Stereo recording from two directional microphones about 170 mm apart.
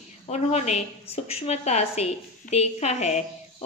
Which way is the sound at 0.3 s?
40° left (ahead or behind).